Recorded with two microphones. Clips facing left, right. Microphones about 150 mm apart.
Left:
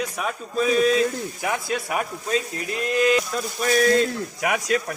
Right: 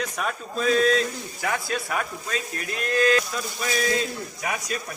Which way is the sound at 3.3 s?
50° left (ahead or behind).